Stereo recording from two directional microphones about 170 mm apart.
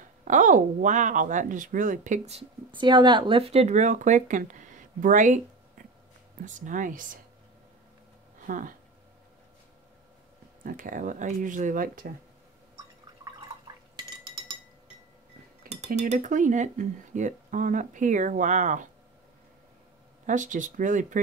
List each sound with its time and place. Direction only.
0.2 s speech: 50° right (ahead or behind)
8.5 s speech: 50° right (ahead or behind)
10.6 s speech: 55° right (ahead or behind)
14.2 s chink: 25° right (ahead or behind)
15.9 s speech: 45° right (ahead or behind)
20.2 s speech: 50° right (ahead or behind)